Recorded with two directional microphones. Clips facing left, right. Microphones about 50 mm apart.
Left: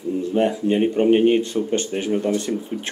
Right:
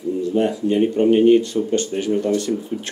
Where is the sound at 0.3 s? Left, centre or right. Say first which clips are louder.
Even; left.